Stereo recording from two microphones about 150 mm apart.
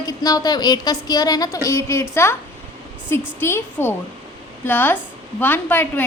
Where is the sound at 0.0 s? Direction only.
25° left (ahead or behind).